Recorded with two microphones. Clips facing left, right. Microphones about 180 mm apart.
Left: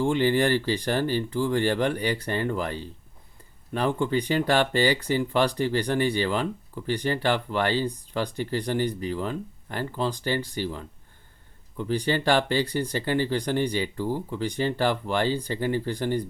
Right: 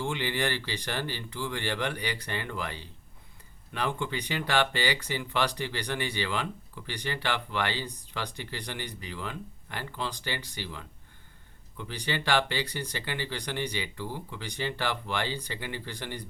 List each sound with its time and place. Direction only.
0.0 s speech: 45° left (ahead or behind)